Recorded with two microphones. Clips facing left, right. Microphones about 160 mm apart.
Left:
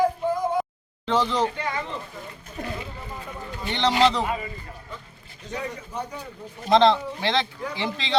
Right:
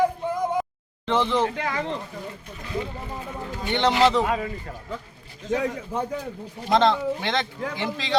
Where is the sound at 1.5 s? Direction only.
90° right.